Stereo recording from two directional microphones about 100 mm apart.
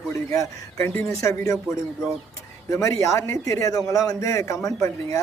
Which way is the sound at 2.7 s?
30° left (ahead or behind).